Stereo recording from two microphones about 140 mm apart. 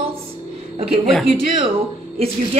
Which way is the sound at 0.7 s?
45° right (ahead or behind).